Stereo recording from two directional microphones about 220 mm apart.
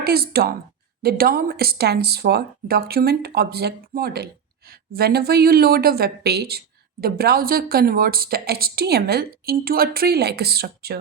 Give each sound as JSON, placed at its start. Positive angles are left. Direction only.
{"t": 0.0, "sound": "a woman's voice", "side_deg": -45}